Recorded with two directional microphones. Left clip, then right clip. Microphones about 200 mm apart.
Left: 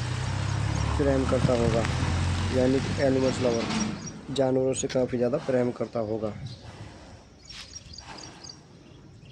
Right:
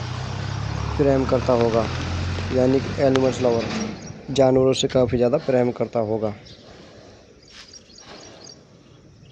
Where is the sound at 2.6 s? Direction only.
20° right (ahead or behind).